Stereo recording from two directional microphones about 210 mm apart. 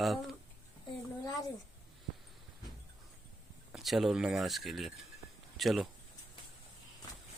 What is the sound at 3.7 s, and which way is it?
Speech, centre (ahead or behind).